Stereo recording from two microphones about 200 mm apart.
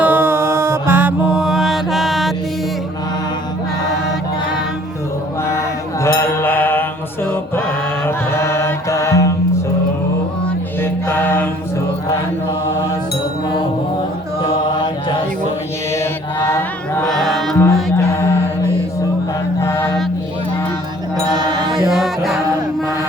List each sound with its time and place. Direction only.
0.0 s mantra: 10° right (ahead or behind)
5.5 s mantra: 15° left (ahead or behind)
8.0 s music: 15° left (ahead or behind)
10.8 s mantra: 10° left (ahead or behind)
12.6 s mantra: 15° left (ahead or behind)
15.9 s mantra: 15° left (ahead or behind)
17.1 s music: centre (ahead or behind)
19.5 s mantra: 15° left (ahead or behind)
21.3 s mantra: 20° right (ahead or behind)
21.7 s music: centre (ahead or behind)